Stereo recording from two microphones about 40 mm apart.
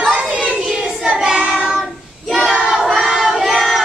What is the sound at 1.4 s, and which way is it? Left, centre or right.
Child singing, right.